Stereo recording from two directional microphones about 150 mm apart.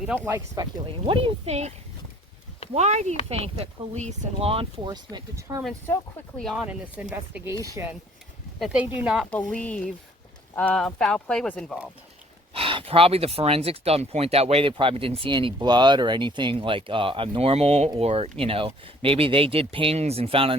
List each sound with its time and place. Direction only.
0.3 s speech: 20° right (ahead or behind); by 1.7 s 45° right (ahead or behind)
2.7 s speech: 50° right (ahead or behind)
4.9 s speech: 25° right (ahead or behind)
5.9 s speech: 5° left (ahead or behind)
6.7 s speech: 10° right (ahead or behind)
7.5 s speech: 20° right (ahead or behind)
8.5 s speech: 5° right (ahead or behind)
9.5 s speech: 5° left (ahead or behind)
12.5 s speech: 40° right (ahead or behind)